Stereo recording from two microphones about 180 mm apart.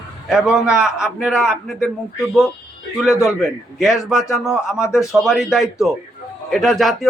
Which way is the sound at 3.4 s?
Centre (ahead or behind).